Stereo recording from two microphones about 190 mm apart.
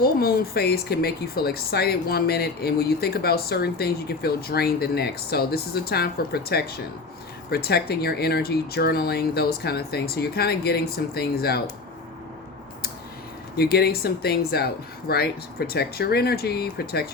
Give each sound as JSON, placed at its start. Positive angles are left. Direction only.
{"t": 0.0, "sound": "speech", "side_deg": 55}
{"t": 13.6, "sound": "speech", "side_deg": 55}